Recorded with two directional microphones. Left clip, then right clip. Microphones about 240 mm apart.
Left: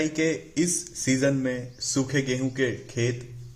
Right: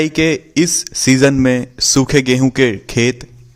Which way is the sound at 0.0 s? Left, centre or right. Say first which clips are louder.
Right 11 dB; right.